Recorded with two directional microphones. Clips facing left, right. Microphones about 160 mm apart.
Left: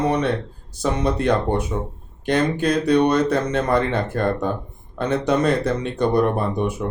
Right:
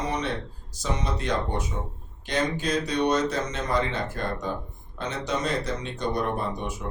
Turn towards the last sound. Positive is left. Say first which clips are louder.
# left 7 dB
turn(degrees=60)  # may be behind; listen again after turning